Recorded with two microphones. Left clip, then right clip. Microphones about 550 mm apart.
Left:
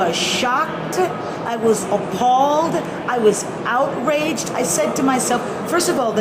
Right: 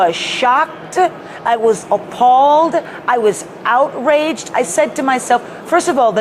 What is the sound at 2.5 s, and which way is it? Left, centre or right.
A woman's voice, right.